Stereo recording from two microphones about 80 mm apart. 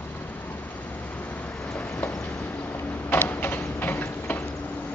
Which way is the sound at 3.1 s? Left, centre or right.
Left.